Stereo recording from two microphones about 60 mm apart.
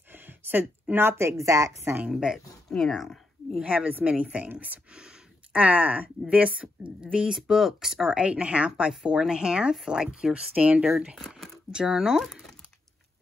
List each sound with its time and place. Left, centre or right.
0.1 s speech: right
2.0 s speech: centre
2.8 s speech: centre
3.6 s speech: right
7.3 s speech: centre
11.1 s a sound: centre
11.7 s speech: centre
12.2 s typing: centre